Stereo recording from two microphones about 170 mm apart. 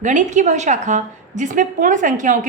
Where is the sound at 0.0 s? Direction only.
45° right (ahead or behind).